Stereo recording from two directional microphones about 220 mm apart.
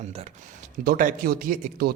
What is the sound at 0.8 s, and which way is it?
A man's voice, 40° right (ahead or behind).